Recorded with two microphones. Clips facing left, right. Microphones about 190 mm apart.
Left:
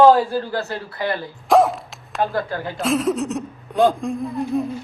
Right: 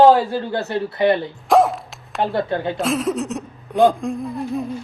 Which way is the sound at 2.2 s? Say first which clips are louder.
Right 2 dB; 25° right (ahead or behind).